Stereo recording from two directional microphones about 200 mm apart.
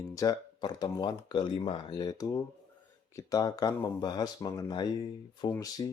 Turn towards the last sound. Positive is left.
turn(degrees=15)  # may be behind; listen again after turning